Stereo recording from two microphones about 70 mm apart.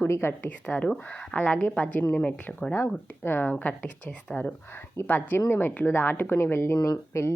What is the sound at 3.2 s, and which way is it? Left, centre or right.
A woman's voice, left.